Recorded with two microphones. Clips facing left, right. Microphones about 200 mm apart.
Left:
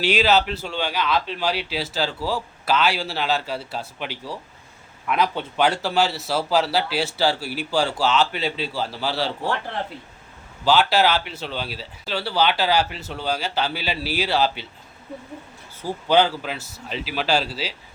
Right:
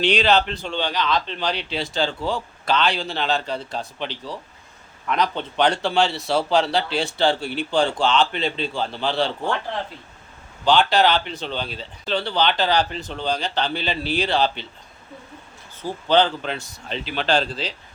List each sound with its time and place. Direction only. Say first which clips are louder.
0.0 s a man's voice: right 1 dB; 5° left (ahead or behind)
10.7 s speech: right 1 dB; 5° left (ahead or behind)
15.8 s speech: even; 10° left (ahead or behind)